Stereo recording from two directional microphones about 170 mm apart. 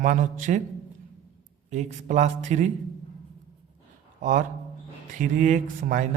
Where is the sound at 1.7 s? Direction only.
45° right (ahead or behind).